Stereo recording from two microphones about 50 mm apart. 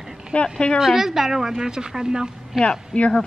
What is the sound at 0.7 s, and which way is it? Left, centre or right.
A woman's voice, centre.